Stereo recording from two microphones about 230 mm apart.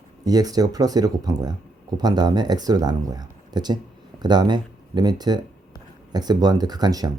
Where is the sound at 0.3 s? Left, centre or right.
Centre.